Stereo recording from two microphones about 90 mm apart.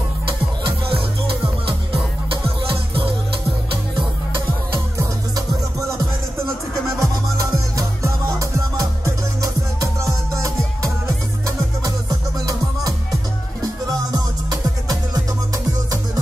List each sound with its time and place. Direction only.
2.7 s music: 65° right (ahead or behind)
4.9 s music: 35° right (ahead or behind)
7.0 s music: 40° right (ahead or behind)
14.5 s music: 40° right (ahead or behind)